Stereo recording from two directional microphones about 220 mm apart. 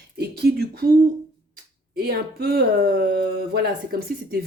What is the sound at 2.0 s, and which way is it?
Speech, 45° right (ahead or behind).